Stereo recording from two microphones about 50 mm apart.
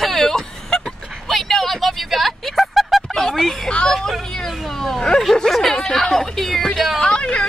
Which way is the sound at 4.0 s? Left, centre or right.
Centre.